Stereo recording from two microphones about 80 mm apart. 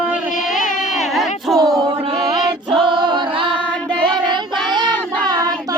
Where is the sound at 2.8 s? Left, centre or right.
Right.